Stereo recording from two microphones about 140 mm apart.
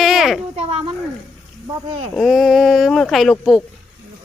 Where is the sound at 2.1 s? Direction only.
Centre (ahead or behind).